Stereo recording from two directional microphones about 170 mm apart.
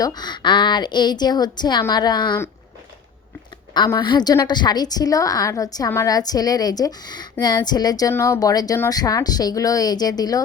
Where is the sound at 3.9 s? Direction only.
25° left (ahead or behind).